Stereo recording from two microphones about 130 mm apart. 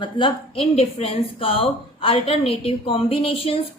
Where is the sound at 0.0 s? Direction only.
40° left (ahead or behind).